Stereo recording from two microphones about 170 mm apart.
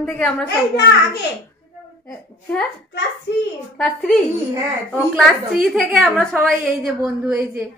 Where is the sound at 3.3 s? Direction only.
85° left.